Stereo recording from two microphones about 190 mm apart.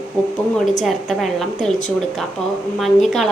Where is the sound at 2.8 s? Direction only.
Centre (ahead or behind).